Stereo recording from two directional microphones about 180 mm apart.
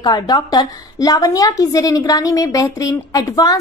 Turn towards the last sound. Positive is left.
turn(degrees=20)  # may be behind; listen again after turning